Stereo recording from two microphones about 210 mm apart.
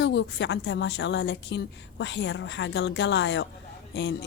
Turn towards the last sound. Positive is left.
turn(degrees=55)  # may be behind; listen again after turning